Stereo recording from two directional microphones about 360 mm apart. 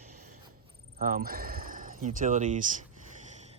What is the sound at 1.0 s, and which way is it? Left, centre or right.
Speech, right.